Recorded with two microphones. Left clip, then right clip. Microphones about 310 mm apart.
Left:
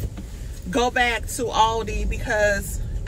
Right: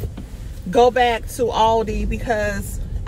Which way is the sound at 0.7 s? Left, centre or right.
Centre.